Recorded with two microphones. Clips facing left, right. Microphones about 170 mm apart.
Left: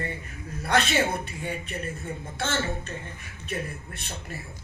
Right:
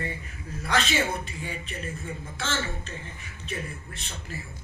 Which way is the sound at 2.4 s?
60° left (ahead or behind).